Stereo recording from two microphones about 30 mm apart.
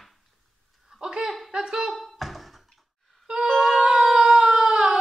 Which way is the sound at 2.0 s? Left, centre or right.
Centre.